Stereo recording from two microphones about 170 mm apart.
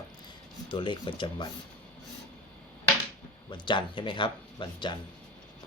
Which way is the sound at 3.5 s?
30° left (ahead or behind).